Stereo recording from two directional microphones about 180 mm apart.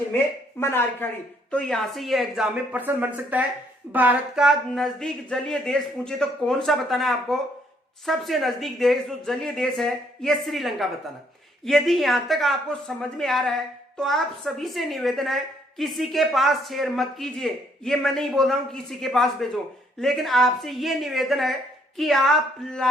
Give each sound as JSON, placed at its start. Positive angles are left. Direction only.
{"t": 0.6, "sound": "speech", "side_deg": 10}